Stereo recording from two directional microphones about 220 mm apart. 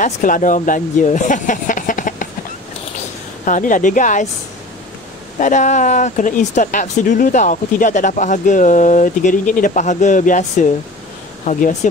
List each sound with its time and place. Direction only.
0.0 s speech: 35° left (ahead or behind)
3.4 s speech: 35° left (ahead or behind)
5.4 s speech: 35° left (ahead or behind)